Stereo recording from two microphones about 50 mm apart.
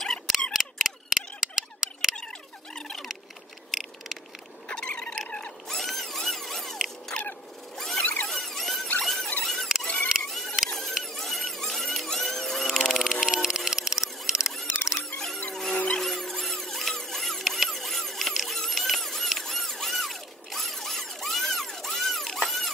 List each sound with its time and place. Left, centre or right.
0.0 s camera: centre
0.5 s scissors: centre
4.6 s frog: centre
5.7 s a sound: centre
7.7 s squeal: centre
8.0 s zipper: left
8.3 s squeal: centre
9.0 s zipper: centre
9.4 s squeal: centre
10.3 s a sound: centre
13.2 s a sound: centre
13.7 s camera: centre
15.1 s music: centre
18.3 s a sound: centre